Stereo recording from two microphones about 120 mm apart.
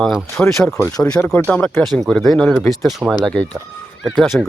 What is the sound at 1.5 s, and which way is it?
Speech, 10° left (ahead or behind).